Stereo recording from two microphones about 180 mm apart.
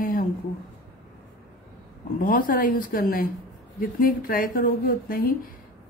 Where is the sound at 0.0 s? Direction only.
50° left (ahead or behind).